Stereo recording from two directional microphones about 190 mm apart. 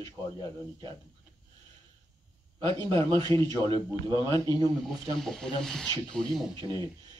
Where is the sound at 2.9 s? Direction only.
25° right (ahead or behind).